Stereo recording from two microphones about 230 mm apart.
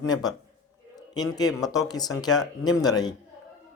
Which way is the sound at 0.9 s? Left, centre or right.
Centre.